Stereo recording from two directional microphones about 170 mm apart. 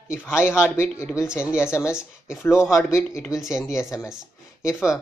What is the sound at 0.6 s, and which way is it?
Speech, 15° left (ahead or behind).